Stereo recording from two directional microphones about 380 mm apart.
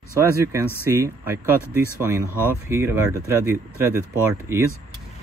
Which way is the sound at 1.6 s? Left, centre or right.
Centre.